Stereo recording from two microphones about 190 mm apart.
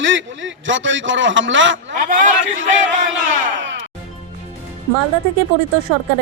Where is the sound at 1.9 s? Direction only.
45° right (ahead or behind).